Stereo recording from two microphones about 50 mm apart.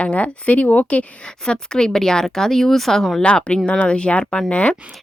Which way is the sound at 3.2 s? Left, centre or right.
Left.